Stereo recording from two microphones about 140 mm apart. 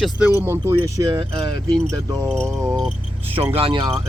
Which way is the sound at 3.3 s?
40° right (ahead or behind).